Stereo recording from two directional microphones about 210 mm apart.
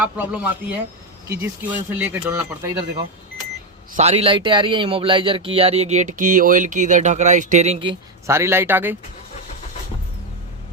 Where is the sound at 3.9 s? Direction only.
30° right (ahead or behind).